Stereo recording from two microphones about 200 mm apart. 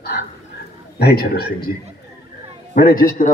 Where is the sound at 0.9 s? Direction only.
50° left (ahead or behind).